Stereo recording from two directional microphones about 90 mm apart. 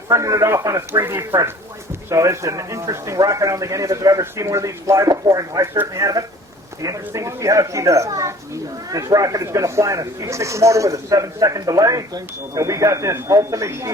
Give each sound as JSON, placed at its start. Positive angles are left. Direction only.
{"t": 0.1, "sound": "speech", "side_deg": -35}